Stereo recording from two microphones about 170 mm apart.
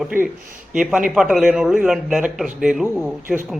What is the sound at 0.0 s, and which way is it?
A man's voice, 10° right (ahead or behind).